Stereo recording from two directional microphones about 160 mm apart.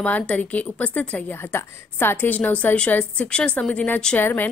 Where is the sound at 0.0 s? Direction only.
10° left (ahead or behind).